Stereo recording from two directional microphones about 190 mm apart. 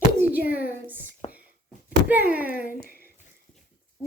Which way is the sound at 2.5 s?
45° left (ahead or behind).